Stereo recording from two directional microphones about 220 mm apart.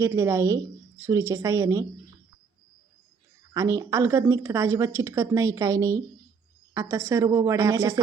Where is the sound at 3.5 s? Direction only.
15° right (ahead or behind).